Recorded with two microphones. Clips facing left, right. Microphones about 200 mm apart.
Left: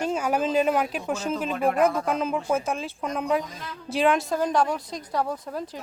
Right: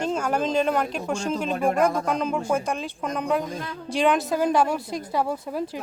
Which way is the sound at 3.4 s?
50° right (ahead or behind).